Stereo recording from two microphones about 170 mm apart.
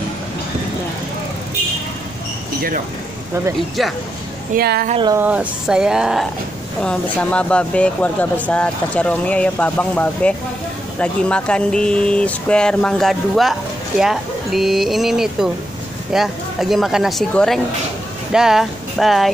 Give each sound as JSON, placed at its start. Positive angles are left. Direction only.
{"t": 4.6, "sound": "a woman's voice", "side_deg": -65}
{"t": 5.1, "sound": "speech", "side_deg": -10}